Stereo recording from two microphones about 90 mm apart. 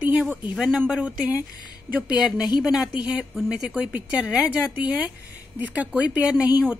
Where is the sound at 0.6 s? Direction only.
10° right (ahead or behind).